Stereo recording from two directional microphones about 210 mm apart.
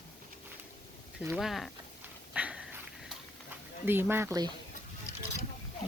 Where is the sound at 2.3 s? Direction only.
5° right (ahead or behind).